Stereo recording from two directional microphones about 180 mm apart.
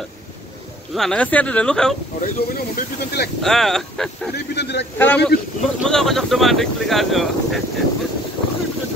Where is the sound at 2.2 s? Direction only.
55° left (ahead or behind).